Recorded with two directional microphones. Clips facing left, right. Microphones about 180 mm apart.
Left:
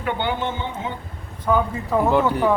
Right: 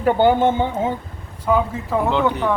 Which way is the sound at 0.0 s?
40° right (ahead or behind).